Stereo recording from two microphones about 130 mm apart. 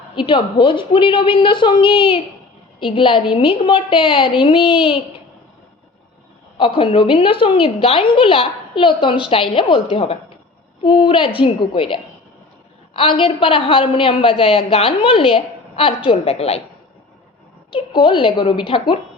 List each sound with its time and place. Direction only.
0.2 s a woman's voice: 40° left (ahead or behind)
6.6 s a woman's voice: 40° left (ahead or behind)
17.7 s a woman's voice: 40° left (ahead or behind)